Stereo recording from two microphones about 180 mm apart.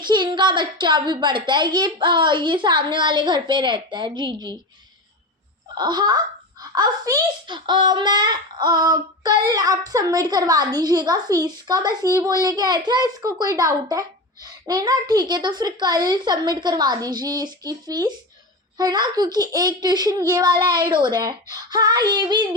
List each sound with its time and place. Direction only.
0.0 s a child's voice: 25° right (ahead or behind)
5.7 s wail: 25° right (ahead or behind)
6.6 s a child's voice: 20° right (ahead or behind)